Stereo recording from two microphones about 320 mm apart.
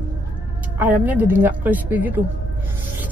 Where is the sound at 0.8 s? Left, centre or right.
Centre.